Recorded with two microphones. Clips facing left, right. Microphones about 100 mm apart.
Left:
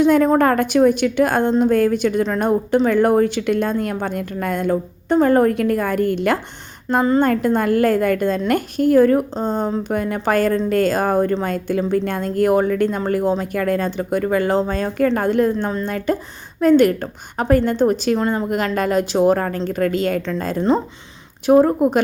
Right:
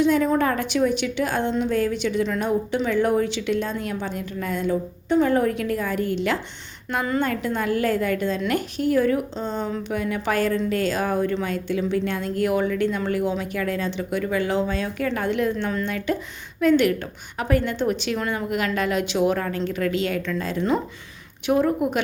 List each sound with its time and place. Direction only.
0.0 s a woman's voice: 50° left (ahead or behind)